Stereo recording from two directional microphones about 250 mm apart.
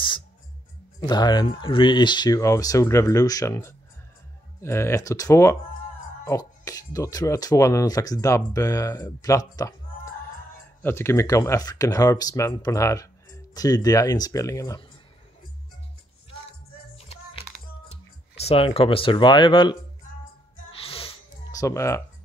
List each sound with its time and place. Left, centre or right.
1.0 s speech: centre
10.8 s speech: centre
16.9 s music: left
17.8 s speech: left
20.7 s music: left